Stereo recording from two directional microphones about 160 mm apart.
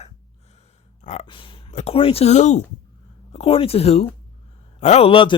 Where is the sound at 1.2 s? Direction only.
30° left (ahead or behind).